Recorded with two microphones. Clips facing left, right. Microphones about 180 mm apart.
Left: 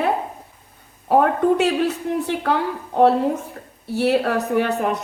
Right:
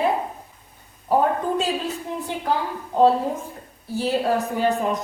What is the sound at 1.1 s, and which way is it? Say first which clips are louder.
A woman's voice: left 4 dB; 70° left (ahead or behind).